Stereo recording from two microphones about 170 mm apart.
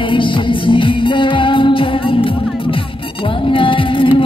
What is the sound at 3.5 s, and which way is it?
Music, 30° left (ahead or behind).